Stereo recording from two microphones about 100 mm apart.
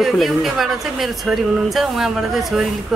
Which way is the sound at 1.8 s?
5° right (ahead or behind).